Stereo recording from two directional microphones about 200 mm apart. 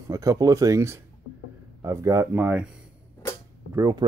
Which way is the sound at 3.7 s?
20° right (ahead or behind).